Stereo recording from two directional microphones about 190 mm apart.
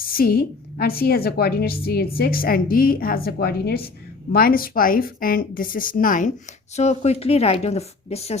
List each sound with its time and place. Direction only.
0.1 s a woman's voice: 50° left (ahead or behind); by 8.4 s 35° left (ahead or behind)